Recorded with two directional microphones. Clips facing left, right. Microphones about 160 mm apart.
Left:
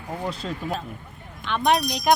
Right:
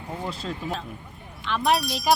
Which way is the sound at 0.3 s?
Centre (ahead or behind).